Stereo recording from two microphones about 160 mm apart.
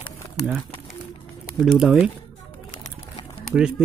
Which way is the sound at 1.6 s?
5° right (ahead or behind).